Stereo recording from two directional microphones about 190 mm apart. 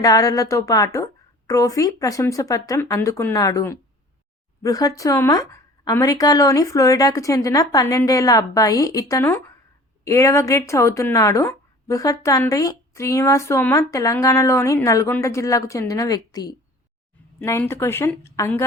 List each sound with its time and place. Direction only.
0.0 s speech: 20° left (ahead or behind)